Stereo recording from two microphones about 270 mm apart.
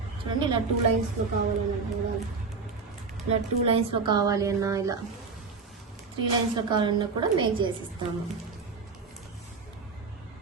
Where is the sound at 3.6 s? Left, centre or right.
Centre.